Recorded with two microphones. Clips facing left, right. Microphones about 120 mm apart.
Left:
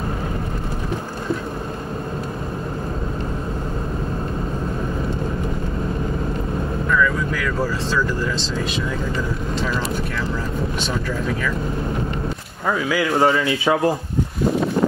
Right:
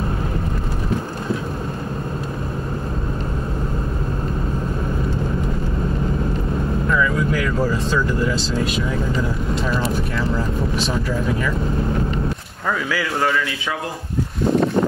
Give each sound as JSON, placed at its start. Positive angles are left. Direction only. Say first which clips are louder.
{"t": 6.9, "sound": "vehicle", "louder": "even", "side_deg": -15}
{"t": 8.2, "sound": "speech", "louder": "right 3 dB", "side_deg": -10}
{"t": 12.6, "sound": "speech", "louder": "left 2 dB", "side_deg": 20}